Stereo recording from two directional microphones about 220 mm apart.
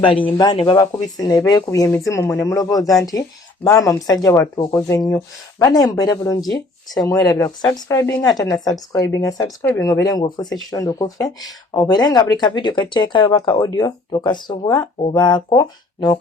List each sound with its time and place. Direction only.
0.3 s speech: 20° left (ahead or behind)